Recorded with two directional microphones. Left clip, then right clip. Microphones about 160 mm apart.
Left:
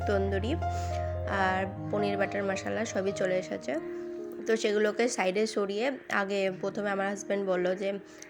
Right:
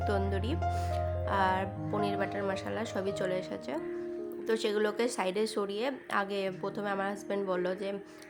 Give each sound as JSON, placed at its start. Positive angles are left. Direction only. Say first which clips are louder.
{"t": 0.0, "sound": "speech", "louder": "left 3 dB", "side_deg": 5}